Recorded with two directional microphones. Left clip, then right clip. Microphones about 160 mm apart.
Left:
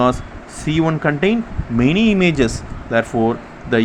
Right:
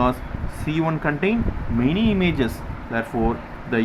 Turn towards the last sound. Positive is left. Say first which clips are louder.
# left 6 dB
turn(degrees=40)  # may be behind; listen again after turning